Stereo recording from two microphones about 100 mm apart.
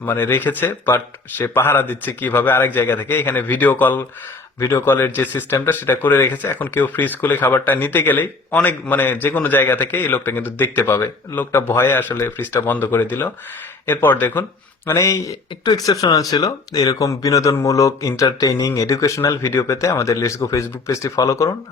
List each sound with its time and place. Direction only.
0.0 s speech: 20° left (ahead or behind)
14.9 s speech: 35° left (ahead or behind)